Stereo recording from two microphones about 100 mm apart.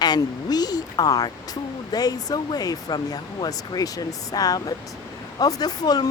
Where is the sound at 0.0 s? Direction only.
45° left (ahead or behind).